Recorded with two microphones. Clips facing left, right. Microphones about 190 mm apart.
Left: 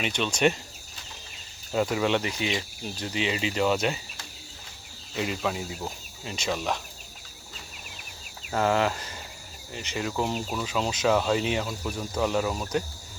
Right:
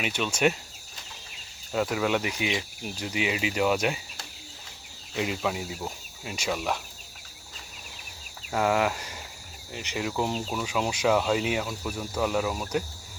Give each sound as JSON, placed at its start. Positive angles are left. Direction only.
{"t": 0.0, "sound": "speech", "side_deg": -5}
{"t": 1.7, "sound": "speech", "side_deg": 0}
{"t": 5.1, "sound": "speech", "side_deg": -15}
{"t": 8.5, "sound": "speech", "side_deg": -10}